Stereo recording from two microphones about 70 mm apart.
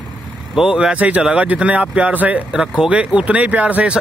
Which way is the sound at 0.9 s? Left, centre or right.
Right.